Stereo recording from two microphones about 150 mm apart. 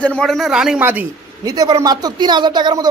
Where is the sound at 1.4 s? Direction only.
25° right (ahead or behind).